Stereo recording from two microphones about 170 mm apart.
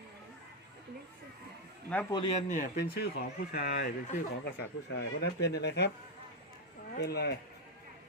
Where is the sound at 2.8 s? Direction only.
65° left (ahead or behind).